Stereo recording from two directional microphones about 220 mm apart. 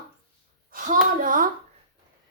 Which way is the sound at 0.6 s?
40° right (ahead or behind).